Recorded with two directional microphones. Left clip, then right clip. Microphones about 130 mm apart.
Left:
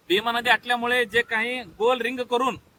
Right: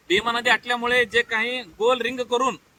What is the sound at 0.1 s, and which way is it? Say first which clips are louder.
A man's voice: right 1 dB; 40° left (ahead or behind).